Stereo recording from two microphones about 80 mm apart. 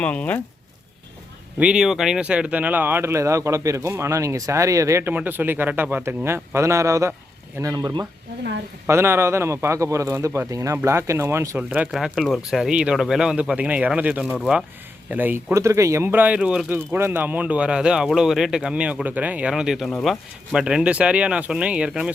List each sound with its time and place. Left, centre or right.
0.0 s speech: centre
1.5 s speech: centre; by 5.0 s right
5.0 s speech: right
8.9 s speech: right
11.5 s speech: right
11.9 s speech: centre; by 15.5 s right
15.5 s speech: right; by 16.6 s centre
16.6 s speech: right; by 19.9 s centre
19.9 s speech: centre
20.5 s speech: centre